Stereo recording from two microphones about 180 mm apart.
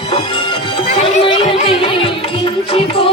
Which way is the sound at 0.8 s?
40° left (ahead or behind).